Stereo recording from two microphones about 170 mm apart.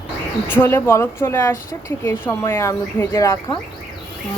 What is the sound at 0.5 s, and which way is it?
Speech, 10° left (ahead or behind).